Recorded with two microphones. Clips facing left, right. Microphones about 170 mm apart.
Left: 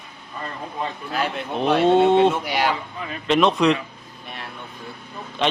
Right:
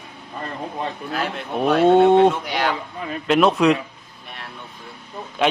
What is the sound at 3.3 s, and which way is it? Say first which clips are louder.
Speech: right 2 dB; 5° right (ahead or behind).